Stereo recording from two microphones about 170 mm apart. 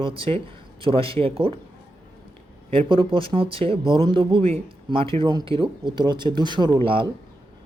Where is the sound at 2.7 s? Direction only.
30° right (ahead or behind).